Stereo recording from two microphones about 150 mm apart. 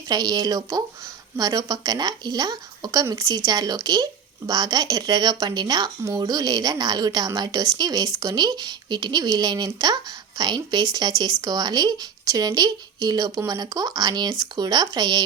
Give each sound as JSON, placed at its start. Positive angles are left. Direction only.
{"t": 0.1, "sound": "speech", "side_deg": -25}